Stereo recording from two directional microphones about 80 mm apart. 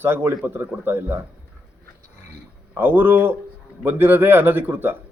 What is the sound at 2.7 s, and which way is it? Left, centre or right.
A man's voice, right.